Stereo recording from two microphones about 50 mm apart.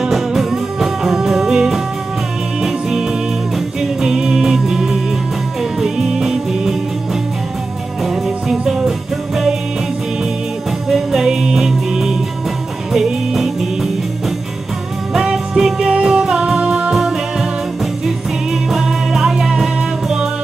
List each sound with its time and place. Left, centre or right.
0.0 s music: centre
8.0 s music: centre
10.9 s music: centre
15.1 s music: centre
16.9 s music: centre